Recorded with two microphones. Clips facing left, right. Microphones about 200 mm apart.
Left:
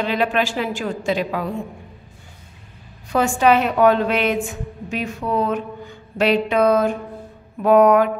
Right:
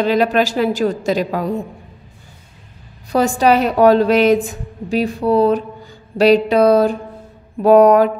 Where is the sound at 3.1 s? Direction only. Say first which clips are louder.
Right 3 dB; 35° right (ahead or behind).